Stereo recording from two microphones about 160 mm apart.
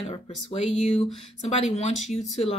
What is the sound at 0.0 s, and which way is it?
Speech, 40° left (ahead or behind).